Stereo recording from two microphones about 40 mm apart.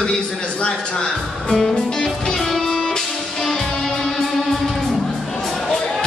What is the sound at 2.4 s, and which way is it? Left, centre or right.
Music, centre.